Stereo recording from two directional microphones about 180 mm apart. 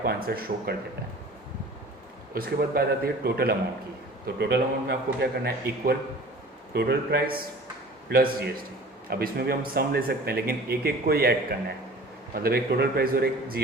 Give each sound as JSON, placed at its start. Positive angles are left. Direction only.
{"t": 0.0, "sound": "speech", "side_deg": -55}
{"t": 2.3, "sound": "speech", "side_deg": -55}